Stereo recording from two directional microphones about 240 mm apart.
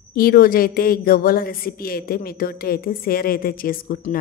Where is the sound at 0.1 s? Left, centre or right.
Left.